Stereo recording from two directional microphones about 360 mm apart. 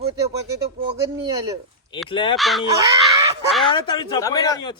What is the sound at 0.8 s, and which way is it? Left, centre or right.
Speech, centre.